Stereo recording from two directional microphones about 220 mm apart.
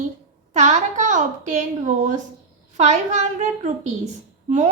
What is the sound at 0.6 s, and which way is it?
A woman's voice, 35° right (ahead or behind).